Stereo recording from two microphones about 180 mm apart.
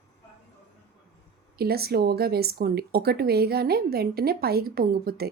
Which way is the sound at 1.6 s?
60° right (ahead or behind).